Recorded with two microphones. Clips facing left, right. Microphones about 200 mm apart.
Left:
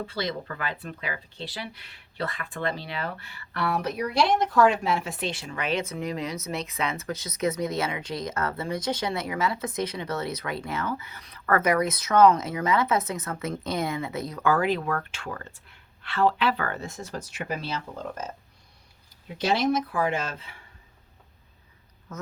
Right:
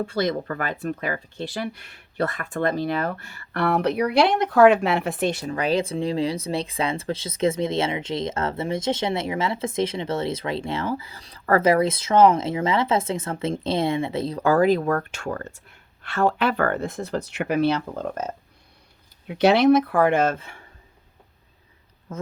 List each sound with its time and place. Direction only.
0.0 s speech: 50° right (ahead or behind); by 18.3 s 65° right (ahead or behind)
19.3 s speech: 65° right (ahead or behind); by 20.7 s 45° right (ahead or behind)
22.1 s speech: 30° right (ahead or behind)